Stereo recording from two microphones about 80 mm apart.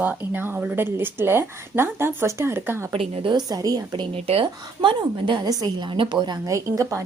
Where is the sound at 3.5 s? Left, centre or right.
Right.